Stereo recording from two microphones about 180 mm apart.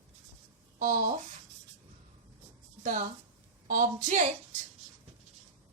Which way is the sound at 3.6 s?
45° right (ahead or behind).